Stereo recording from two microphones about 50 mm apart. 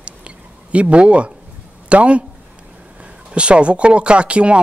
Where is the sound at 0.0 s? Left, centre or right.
Right.